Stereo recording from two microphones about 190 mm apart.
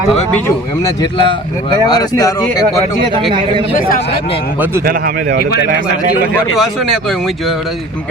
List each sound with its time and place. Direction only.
0.1 s speech: 5° left (ahead or behind)
0.9 s speech: 25° left (ahead or behind)
3.8 s speech: 45° left (ahead or behind)
4.9 s speech: 50° right (ahead or behind)